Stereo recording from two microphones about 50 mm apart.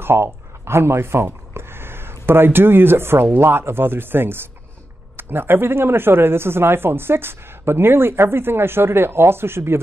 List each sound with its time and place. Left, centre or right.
0.0 s speech: right